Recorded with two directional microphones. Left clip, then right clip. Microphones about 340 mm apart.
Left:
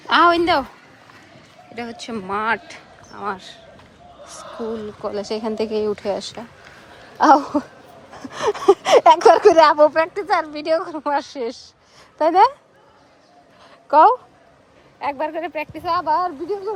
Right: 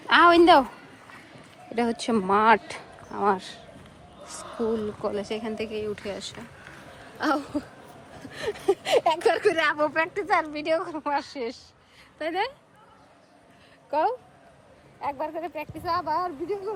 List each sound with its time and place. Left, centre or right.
0.1 s a woman's voice: centre
1.7 s speech: centre
13.9 s speech: left